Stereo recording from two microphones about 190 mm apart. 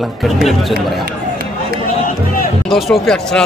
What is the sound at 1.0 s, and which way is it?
Run, 60° right (ahead or behind).